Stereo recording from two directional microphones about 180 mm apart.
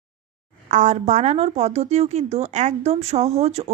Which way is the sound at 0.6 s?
40° right (ahead or behind).